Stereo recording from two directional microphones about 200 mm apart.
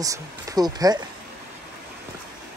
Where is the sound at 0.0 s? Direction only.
15° right (ahead or behind).